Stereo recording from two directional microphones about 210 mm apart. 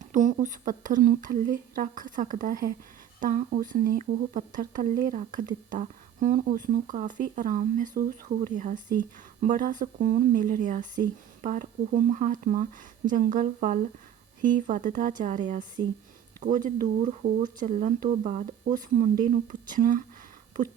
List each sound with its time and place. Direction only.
0.0 s a woman's voice: 35° right (ahead or behind)